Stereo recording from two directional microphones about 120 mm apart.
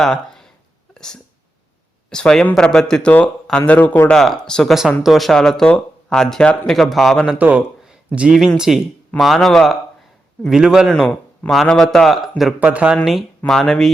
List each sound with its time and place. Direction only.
0.0 s speech: 5° left (ahead or behind)
4.1 s speech: 5° left (ahead or behind)
7.3 s speech: 15° right (ahead or behind)
12.5 s speech: 10° right (ahead or behind)
13.4 s speech: 5° left (ahead or behind)